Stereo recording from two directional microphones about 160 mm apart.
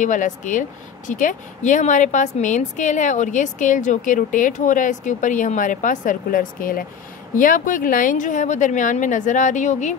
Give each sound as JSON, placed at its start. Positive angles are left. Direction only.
{"t": 0.0, "sound": "speech", "side_deg": 50}